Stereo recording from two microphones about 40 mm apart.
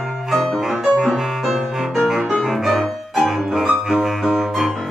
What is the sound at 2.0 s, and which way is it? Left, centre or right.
Piano, centre.